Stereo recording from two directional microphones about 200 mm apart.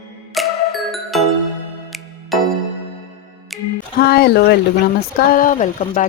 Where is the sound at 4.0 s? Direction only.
50° left (ahead or behind).